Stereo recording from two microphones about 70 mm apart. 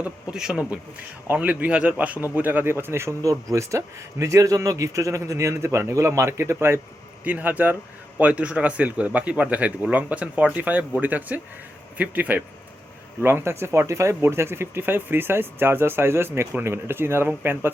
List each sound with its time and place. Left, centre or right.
0.0 s speech: centre; by 3.2 s right
3.2 s speech: right
7.3 s speech: right
13.2 s speech: right